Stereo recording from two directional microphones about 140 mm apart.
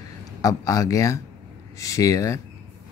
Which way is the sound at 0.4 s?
25° left (ahead or behind).